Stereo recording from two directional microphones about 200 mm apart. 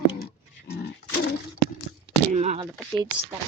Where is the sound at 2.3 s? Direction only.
35° right (ahead or behind).